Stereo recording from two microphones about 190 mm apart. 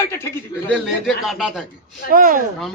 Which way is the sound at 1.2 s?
Centre (ahead or behind).